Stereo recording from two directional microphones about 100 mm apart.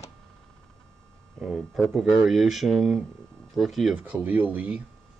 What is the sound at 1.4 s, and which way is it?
Speech, centre (ahead or behind).